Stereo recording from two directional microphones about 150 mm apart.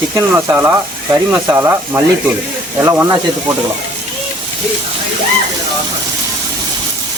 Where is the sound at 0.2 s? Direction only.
15° right (ahead or behind).